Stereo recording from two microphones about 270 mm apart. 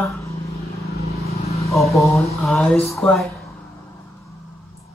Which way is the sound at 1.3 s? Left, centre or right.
Left.